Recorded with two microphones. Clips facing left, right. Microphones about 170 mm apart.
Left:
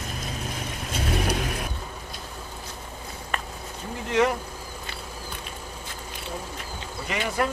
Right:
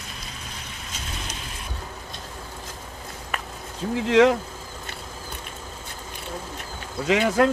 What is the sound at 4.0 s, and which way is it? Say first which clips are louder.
Speech: right 6 dB; 90° right.